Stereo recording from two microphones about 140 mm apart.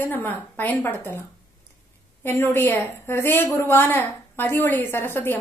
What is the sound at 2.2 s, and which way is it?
A woman's voice, 15° left (ahead or behind).